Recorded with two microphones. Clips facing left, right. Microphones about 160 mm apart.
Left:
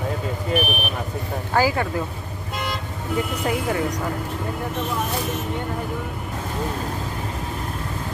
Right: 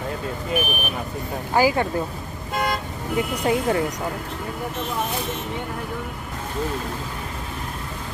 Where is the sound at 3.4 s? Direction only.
25° right (ahead or behind).